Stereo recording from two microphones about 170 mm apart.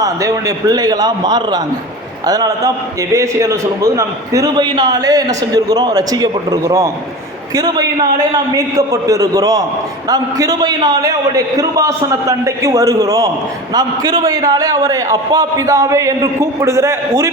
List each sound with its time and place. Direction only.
0.0 s a man's voice: 20° right (ahead or behind)